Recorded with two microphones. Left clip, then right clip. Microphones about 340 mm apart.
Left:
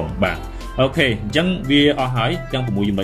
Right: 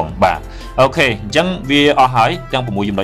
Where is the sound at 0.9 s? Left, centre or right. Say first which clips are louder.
Right 4 dB; centre.